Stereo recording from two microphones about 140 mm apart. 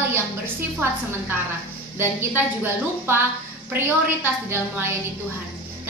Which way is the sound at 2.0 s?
15° right (ahead or behind).